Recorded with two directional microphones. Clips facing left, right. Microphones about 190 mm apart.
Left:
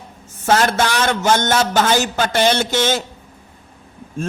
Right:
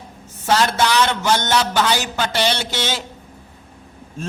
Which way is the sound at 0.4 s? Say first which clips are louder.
Left 2 dB; 50° left (ahead or behind).